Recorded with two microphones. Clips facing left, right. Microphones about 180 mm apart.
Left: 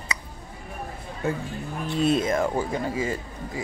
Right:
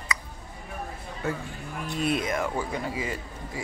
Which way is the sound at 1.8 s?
25° left (ahead or behind).